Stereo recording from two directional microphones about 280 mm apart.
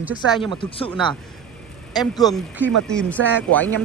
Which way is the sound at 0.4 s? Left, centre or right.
Centre.